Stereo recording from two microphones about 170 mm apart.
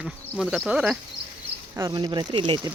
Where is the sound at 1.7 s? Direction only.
20° right (ahead or behind).